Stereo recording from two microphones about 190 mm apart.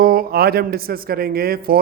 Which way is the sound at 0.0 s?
50° right (ahead or behind).